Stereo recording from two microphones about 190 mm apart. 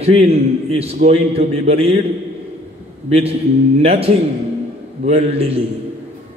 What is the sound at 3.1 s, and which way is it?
A man's voice, 30° right (ahead or behind).